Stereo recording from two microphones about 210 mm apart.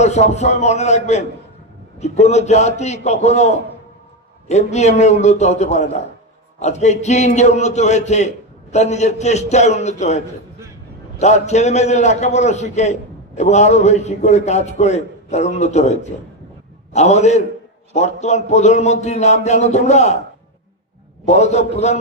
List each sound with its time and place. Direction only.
0.0 s a man's voice: 30° left (ahead or behind)
11.2 s a man's voice: 35° left (ahead or behind)
21.2 s a man's voice: 30° left (ahead or behind)